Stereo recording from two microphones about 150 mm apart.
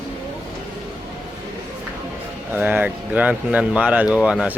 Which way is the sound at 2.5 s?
10° right (ahead or behind).